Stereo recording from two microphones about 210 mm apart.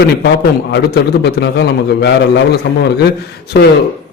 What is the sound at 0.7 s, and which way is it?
A man's voice, 55° left (ahead or behind).